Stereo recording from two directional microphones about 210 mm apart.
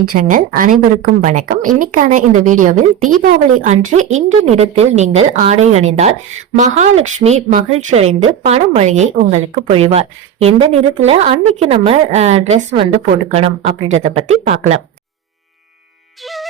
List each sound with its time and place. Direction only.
0.0 s speech: 45° right (ahead or behind)
16.2 s music: centre (ahead or behind)